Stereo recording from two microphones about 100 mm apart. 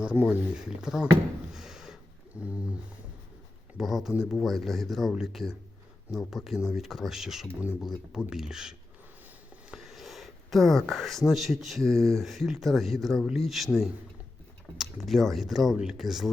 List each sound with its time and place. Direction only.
0.2 s speech: 10° right (ahead or behind)
1.5 s a sound: 5° right (ahead or behind)
2.3 s speech: 10° right (ahead or behind)
3.8 s speech: 5° right (ahead or behind)
9.7 s speech: centre (ahead or behind)